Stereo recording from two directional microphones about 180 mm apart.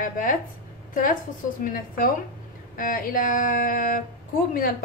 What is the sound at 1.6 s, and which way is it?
Speech, 50° left (ahead or behind).